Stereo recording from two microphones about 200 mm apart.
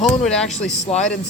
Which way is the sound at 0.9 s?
30° left (ahead or behind).